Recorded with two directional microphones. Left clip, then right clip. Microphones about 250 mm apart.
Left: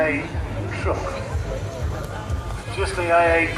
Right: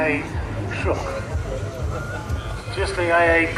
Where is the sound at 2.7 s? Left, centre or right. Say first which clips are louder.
Even; right.